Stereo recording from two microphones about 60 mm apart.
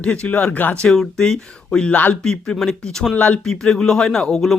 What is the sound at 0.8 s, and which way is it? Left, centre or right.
Speech, centre.